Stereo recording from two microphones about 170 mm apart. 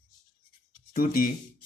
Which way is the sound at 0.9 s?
60° left (ahead or behind).